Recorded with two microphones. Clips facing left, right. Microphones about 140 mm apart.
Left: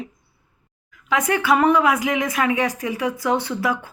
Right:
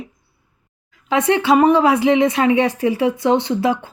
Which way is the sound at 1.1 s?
25° right (ahead or behind).